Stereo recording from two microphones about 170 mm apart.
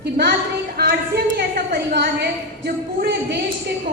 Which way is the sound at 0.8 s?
65° right (ahead or behind).